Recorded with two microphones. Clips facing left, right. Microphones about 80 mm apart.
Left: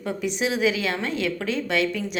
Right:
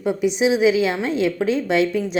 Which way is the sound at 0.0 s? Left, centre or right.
Centre.